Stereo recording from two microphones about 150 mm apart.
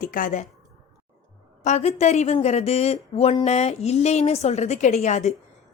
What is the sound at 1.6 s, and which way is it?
A woman's voice, 50° left (ahead or behind).